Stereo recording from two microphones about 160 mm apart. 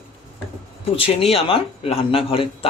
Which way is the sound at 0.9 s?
35° left (ahead or behind).